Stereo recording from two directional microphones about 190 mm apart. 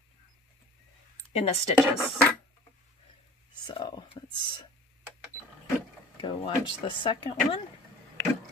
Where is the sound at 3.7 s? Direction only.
25° left (ahead or behind).